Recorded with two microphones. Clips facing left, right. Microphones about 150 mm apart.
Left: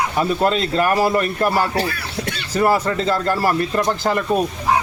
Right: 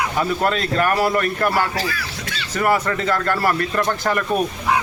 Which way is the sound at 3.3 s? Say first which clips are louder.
Left 1 dB; 15° left (ahead or behind).